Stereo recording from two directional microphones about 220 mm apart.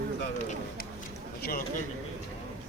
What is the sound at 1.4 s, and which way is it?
Speech, 40° left (ahead or behind).